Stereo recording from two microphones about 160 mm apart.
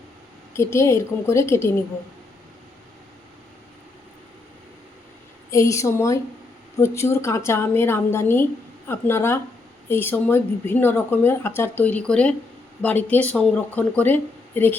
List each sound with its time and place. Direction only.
0.5 s speech: 15° left (ahead or behind)
5.5 s a woman's voice: 20° left (ahead or behind)